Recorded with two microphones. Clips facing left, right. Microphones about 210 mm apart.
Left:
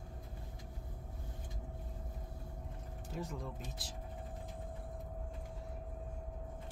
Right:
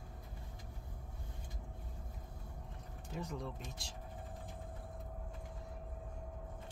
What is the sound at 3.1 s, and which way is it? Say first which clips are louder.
Speech: even; centre (ahead or behind).